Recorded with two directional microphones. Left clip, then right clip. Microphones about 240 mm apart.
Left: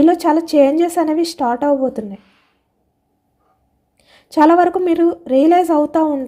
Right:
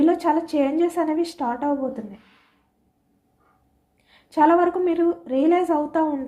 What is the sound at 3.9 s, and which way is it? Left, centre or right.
A woman's voice, left.